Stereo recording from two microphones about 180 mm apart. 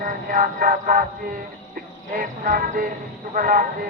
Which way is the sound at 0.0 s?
50° right (ahead or behind).